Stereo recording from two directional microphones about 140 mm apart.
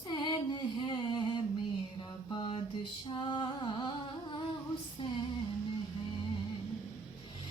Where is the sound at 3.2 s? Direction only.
35° left (ahead or behind).